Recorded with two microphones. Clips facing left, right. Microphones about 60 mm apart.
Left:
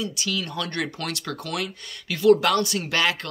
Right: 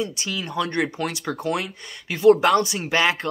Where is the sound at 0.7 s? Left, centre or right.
Centre.